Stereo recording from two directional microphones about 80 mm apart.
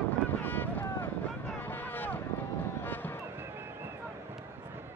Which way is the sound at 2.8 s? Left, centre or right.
Left.